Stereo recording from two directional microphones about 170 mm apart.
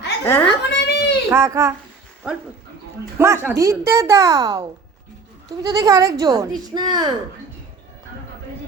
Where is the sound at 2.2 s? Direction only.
5° right (ahead or behind); by 7.1 s 25° right (ahead or behind).